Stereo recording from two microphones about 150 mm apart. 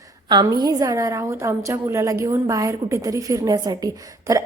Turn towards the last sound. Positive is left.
turn(degrees=-20)  # may be behind; listen again after turning